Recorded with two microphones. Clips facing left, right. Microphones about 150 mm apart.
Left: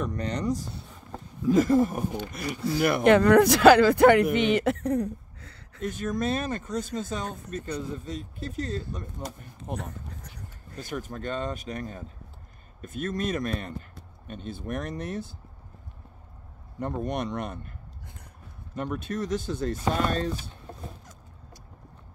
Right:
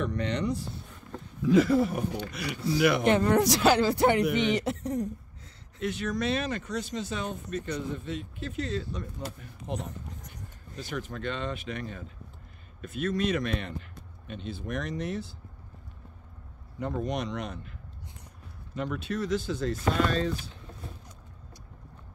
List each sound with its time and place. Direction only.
0.0 s speech: 40° left (ahead or behind); by 5.6 s 65° left (ahead or behind)
5.8 s speech: 45° left (ahead or behind)
16.8 s speech: 55° left (ahead or behind)
18.8 s speech: 45° left (ahead or behind)